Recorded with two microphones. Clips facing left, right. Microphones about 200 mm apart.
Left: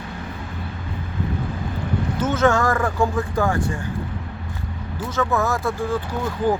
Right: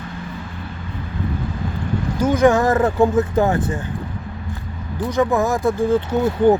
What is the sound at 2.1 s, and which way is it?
Speech, 15° right (ahead or behind).